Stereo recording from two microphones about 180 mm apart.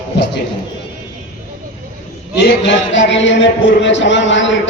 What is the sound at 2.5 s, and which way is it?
Music, 85° left.